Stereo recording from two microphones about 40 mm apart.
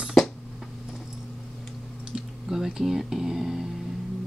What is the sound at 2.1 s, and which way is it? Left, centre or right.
Speech, centre.